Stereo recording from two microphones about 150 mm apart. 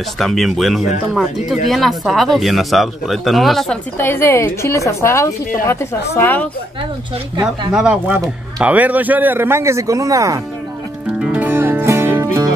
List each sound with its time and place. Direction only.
0.2 s speech: centre (ahead or behind)
4.0 s a woman's voice: 15° left (ahead or behind)
7.7 s speech: 5° right (ahead or behind)
11.1 s music: 10° right (ahead or behind)